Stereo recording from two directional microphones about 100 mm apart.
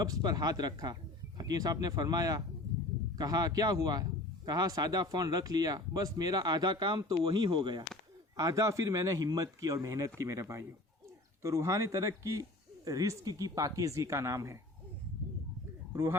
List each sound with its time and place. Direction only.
0.0 s speech: 40° right (ahead or behind)
8.4 s speech: 35° right (ahead or behind)
15.9 s speech: 25° right (ahead or behind)